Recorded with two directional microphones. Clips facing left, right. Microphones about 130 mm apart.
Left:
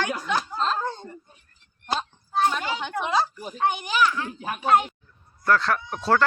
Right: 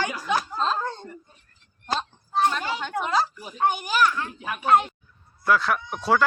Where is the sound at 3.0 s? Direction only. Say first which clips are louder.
Even; 15° left (ahead or behind).